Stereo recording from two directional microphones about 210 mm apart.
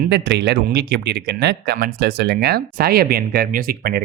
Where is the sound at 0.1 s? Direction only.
55° right (ahead or behind).